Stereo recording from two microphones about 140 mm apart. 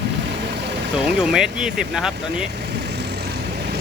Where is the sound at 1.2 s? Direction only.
5° right (ahead or behind).